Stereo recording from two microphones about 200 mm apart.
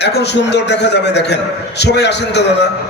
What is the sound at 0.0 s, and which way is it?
A man's voice, 55° left (ahead or behind).